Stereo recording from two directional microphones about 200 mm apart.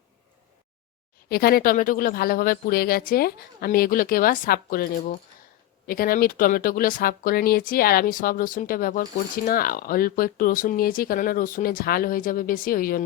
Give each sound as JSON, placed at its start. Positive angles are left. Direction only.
{"t": 1.3, "sound": "speech", "side_deg": 50}